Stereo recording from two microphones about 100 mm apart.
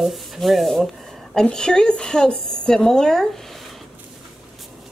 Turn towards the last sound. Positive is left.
turn(degrees=5)  # may be behind; listen again after turning